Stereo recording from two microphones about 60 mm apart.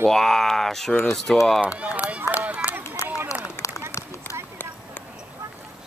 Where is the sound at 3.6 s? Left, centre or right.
Left.